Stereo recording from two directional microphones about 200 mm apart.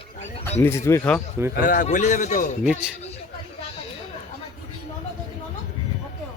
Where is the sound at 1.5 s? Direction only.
40° left (ahead or behind).